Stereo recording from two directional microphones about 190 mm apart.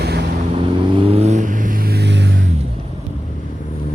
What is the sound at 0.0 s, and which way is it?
Vehicle, 60° right (ahead or behind).